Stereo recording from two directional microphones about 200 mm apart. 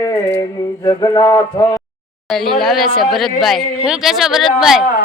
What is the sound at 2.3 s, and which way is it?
Speech, centre (ahead or behind).